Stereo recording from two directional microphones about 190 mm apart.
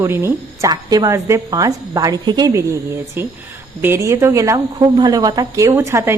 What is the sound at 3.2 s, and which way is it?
A woman's voice, 10° right (ahead or behind).